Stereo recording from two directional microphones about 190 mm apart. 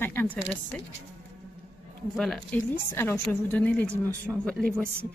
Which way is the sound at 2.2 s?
Centre (ahead or behind).